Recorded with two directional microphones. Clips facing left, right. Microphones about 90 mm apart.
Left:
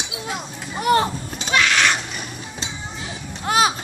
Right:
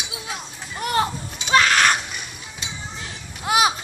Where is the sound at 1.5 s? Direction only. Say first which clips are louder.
Right 2 dB; 40° right (ahead or behind).